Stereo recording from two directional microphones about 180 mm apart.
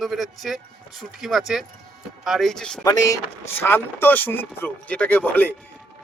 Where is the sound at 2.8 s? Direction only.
20° left (ahead or behind).